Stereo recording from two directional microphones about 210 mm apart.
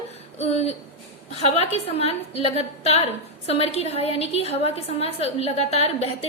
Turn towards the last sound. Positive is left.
turn(degrees=30)  # may be behind; listen again after turning